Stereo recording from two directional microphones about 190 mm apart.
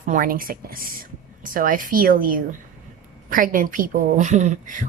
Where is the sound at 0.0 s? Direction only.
45° right (ahead or behind).